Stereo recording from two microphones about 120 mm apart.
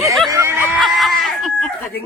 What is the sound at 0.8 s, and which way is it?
Chicken, centre (ahead or behind).